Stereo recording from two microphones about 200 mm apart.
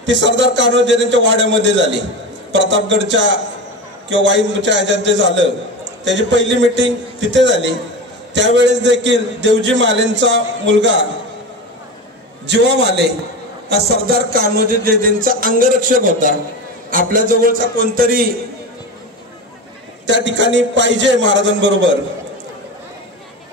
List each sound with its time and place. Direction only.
0.0 s a man's voice: 65° right (ahead or behind)
12.4 s a man's voice: 60° right (ahead or behind)
13.7 s a sound: 50° right (ahead or behind)
20.1 s a man's voice: 65° right (ahead or behind)